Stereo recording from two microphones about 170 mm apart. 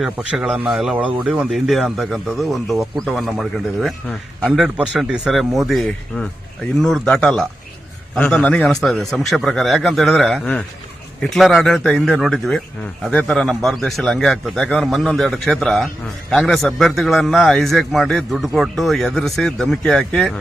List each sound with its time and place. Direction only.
0.0 s a man's voice: 5° right (ahead or behind)